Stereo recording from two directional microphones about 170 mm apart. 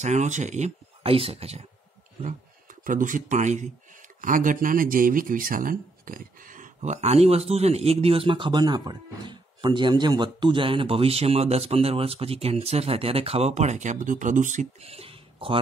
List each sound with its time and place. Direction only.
0.0 s speech: 45° right (ahead or behind)
2.2 s speech: 50° right (ahead or behind); by 15.6 s 35° right (ahead or behind)